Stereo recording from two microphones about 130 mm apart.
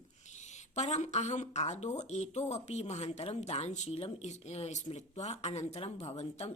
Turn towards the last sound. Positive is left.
turn(degrees=55)  # may be behind; listen again after turning